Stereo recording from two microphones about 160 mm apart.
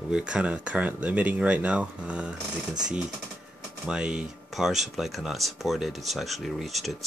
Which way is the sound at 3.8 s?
5° right (ahead or behind).